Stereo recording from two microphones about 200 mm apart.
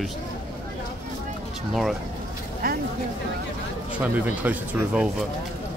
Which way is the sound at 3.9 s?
10° right (ahead or behind).